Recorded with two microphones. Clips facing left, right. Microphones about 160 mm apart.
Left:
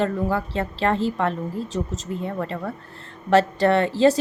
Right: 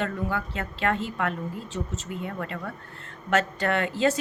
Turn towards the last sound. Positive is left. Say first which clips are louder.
# left 7 dB
turn(degrees=35)  # may be behind; listen again after turning